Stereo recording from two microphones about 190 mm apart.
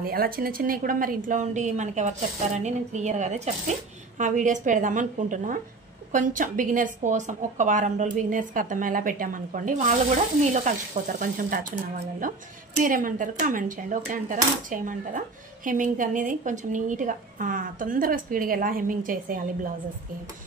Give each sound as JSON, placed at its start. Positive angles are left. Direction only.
{"t": 0.0, "sound": "cutlery", "side_deg": -50}
{"t": 2.6, "sound": "speech", "side_deg": -40}
{"t": 4.2, "sound": "cutlery", "side_deg": -40}